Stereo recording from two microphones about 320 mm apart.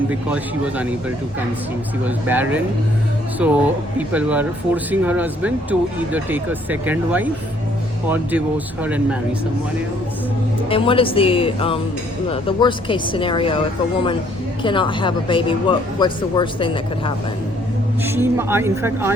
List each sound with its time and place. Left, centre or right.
0.1 s speech: centre
10.7 s a woman's voice: centre
14.6 s a woman's voice: centre
18.0 s speech: centre